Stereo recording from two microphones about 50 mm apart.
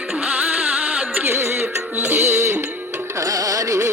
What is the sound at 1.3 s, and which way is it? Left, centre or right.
Music, right.